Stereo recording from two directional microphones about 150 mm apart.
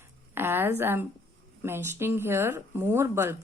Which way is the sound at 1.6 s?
15° right (ahead or behind).